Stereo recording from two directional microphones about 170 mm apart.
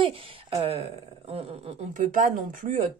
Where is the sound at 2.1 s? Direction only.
50° right (ahead or behind).